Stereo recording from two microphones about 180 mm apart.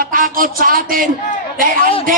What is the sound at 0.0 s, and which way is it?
A man's voice, 50° right (ahead or behind).